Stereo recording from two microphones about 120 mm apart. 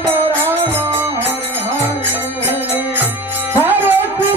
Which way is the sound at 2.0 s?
15° right (ahead or behind).